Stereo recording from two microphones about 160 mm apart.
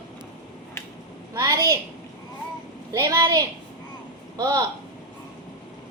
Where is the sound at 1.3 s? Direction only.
25° right (ahead or behind).